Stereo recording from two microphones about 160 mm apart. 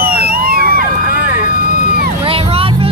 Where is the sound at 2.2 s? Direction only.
35° right (ahead or behind).